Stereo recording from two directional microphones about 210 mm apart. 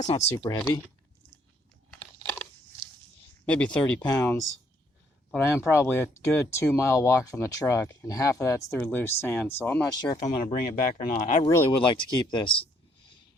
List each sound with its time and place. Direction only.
0.0 s speech: 30° left (ahead or behind)
0.4 s speech: 20° left (ahead or behind)
1.9 s crunch: 10° left (ahead or behind)
3.4 s speech: 5° left (ahead or behind)
5.5 s speech: 10° left (ahead or behind)
9.9 s speech: 20° left (ahead or behind)
10.5 s speech: 40° left (ahead or behind)
11.4 s speech: 15° left (ahead or behind)